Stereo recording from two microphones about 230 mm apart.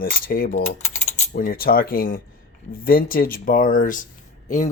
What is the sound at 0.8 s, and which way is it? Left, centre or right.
Coin, left.